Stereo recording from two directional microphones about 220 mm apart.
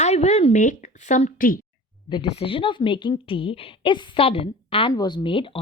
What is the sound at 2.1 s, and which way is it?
A woman's voice, 25° left (ahead or behind).